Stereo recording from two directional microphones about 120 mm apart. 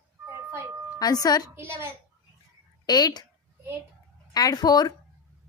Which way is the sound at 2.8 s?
35° left (ahead or behind).